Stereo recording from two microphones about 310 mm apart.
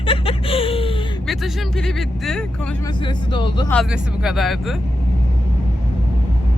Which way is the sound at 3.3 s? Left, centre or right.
Centre.